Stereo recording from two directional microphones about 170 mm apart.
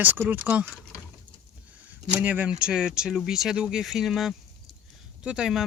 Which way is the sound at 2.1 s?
10° right (ahead or behind).